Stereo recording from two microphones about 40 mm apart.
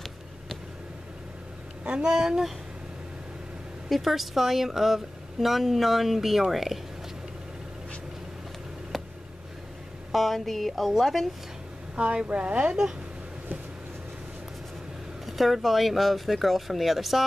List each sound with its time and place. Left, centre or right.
1.9 s speech: right
3.9 s speech: centre
8.9 s a sound: centre
10.1 s speech: centre
11.9 s speech: right
15.2 s speech: centre